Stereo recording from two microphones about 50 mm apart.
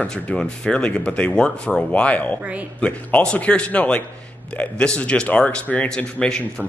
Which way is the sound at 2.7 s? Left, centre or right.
Left.